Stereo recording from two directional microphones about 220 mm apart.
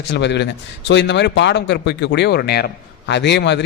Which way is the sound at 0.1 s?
50° left (ahead or behind).